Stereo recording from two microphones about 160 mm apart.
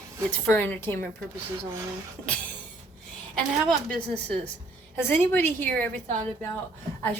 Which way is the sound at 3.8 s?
5° left (ahead or behind).